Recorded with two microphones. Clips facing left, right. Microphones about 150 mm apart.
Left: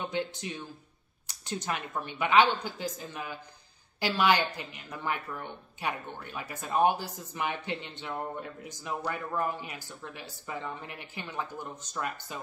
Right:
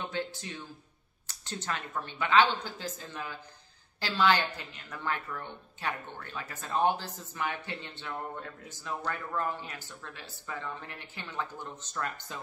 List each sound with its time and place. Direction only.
0.0 s a woman's voice: 15° left (ahead or behind)